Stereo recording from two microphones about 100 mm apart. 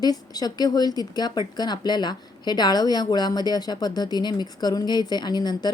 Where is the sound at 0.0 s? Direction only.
40° left (ahead or behind).